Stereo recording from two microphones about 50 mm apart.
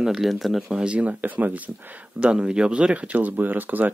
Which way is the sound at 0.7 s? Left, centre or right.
Centre.